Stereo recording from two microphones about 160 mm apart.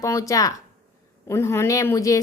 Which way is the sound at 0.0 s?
20° left (ahead or behind).